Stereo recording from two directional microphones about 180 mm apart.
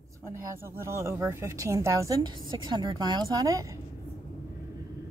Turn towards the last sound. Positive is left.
turn(degrees=-20)  # may be behind; listen again after turning